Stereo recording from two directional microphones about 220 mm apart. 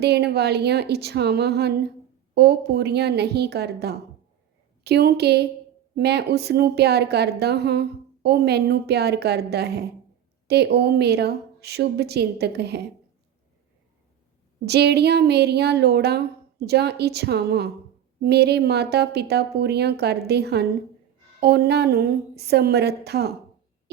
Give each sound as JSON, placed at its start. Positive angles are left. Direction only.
{"t": 0.0, "sound": "speech", "side_deg": -50}
{"t": 14.6, "sound": "speech", "side_deg": -50}